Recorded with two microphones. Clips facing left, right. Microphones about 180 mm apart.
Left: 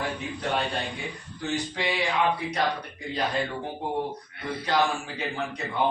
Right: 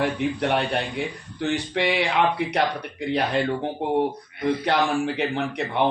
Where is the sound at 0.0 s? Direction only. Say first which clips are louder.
Right 8 dB; 70° right (ahead or behind).